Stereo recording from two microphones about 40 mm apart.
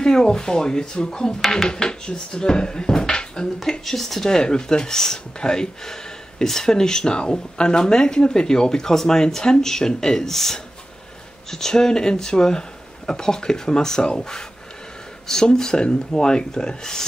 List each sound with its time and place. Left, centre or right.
0.0 s speech: centre
3.8 s speech: centre
15.4 s speech: centre